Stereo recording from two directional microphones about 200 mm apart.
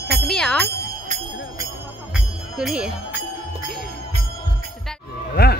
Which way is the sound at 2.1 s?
5° right (ahead or behind).